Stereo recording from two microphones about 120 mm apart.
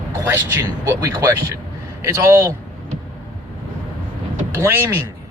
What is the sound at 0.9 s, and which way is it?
Speech, 35° right (ahead or behind).